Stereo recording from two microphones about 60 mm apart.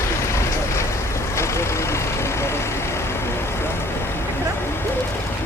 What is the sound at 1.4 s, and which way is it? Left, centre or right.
Vehicle, left.